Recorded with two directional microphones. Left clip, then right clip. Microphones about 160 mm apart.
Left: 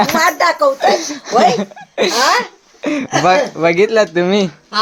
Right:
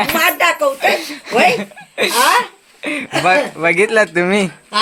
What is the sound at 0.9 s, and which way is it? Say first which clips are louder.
Speech: left 3 dB; 75° left (ahead or behind).